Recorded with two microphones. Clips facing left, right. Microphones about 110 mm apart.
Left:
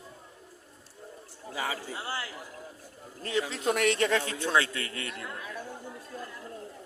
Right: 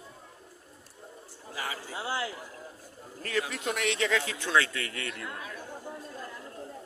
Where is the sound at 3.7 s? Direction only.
45° left (ahead or behind).